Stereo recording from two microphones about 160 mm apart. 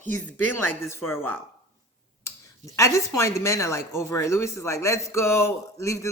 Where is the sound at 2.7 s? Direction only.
20° left (ahead or behind).